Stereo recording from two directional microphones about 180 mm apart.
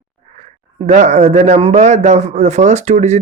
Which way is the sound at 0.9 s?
40° right (ahead or behind).